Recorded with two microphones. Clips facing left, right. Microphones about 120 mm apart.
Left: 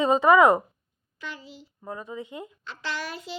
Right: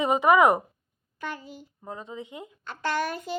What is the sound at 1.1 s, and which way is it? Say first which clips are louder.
Child singing: right 4 dB; 50° right (ahead or behind).